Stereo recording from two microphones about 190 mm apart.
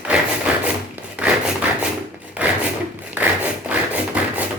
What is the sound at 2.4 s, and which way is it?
Wood, 10° right (ahead or behind).